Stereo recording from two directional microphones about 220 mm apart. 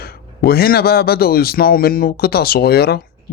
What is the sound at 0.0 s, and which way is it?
A man's voice, 45° left (ahead or behind).